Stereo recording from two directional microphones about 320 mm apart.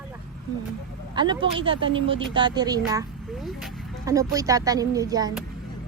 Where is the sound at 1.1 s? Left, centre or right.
Centre.